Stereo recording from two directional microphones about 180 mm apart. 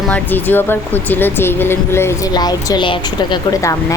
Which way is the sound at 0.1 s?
10° left (ahead or behind).